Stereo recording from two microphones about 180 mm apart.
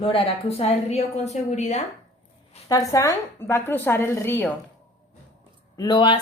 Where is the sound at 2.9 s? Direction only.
15° left (ahead or behind).